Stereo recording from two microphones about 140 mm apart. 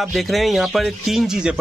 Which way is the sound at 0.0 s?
Centre (ahead or behind).